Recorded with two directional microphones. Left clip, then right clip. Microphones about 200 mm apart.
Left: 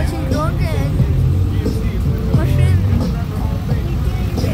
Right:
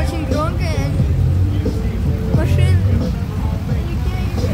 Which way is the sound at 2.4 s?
10° right (ahead or behind).